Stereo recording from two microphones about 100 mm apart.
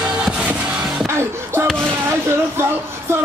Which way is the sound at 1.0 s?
25° right (ahead or behind).